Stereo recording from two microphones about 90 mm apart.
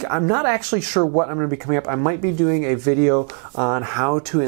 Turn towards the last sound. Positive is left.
turn(degrees=-15)  # may be behind; listen again after turning